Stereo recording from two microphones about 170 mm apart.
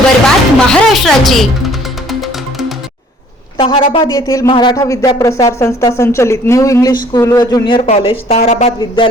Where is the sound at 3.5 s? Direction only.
30° left (ahead or behind).